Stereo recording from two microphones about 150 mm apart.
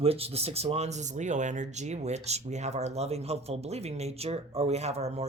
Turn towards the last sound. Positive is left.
turn(degrees=-45)  # may be behind; listen again after turning